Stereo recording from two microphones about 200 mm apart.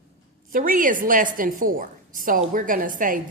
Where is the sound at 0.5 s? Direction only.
45° right (ahead or behind).